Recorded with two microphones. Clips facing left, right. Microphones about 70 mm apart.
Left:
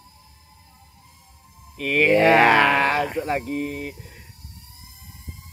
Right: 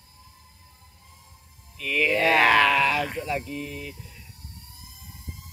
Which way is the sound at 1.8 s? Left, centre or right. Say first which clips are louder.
Left 6 dB; left.